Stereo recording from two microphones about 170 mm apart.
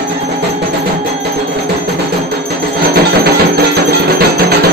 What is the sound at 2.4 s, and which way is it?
Music, 70° right (ahead or behind).